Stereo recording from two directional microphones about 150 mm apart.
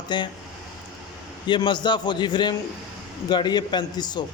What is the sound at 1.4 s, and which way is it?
A man's voice, 30° left (ahead or behind).